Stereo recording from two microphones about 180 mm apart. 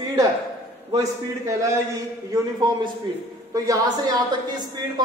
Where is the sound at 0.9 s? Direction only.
20° right (ahead or behind).